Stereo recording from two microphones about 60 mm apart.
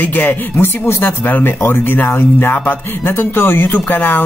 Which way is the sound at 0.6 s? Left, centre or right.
Left.